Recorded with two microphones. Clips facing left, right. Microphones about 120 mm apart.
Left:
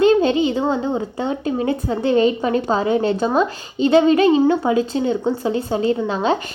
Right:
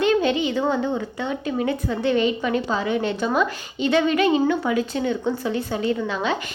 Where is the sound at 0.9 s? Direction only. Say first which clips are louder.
Left 4 dB; 30° left (ahead or behind).